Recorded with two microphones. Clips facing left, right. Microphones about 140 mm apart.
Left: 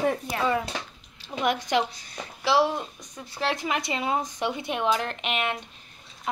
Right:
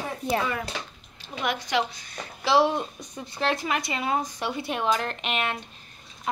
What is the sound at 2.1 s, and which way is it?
Speech, 10° left (ahead or behind).